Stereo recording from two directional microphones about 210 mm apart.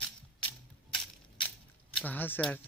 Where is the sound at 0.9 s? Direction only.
Centre (ahead or behind).